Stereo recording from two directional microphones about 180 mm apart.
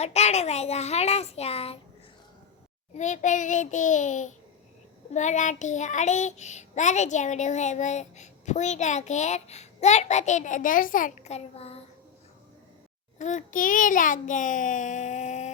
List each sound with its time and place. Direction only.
0.0 s child singing: 35° left (ahead or behind)
2.9 s a child's voice: 40° left (ahead or behind)
5.1 s child singing: 40° left (ahead or behind)
13.1 s a child's voice: 40° left (ahead or behind)